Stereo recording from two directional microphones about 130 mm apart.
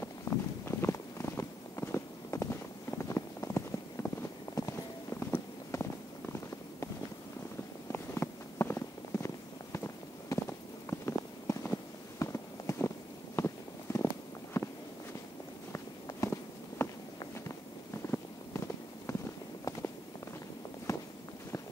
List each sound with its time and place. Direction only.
0.0 s walk: 20° left (ahead or behind)
7.9 s a sound: 20° left (ahead or behind)
10.3 s walk: 25° left (ahead or behind)
10.9 s a sound: 20° left (ahead or behind)
13.9 s walk: 20° left (ahead or behind)
15.7 s walk: 25° left (ahead or behind)
20.9 s walk: 25° left (ahead or behind)